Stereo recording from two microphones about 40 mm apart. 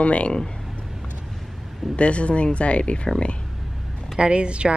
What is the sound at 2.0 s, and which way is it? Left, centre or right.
Speech, left.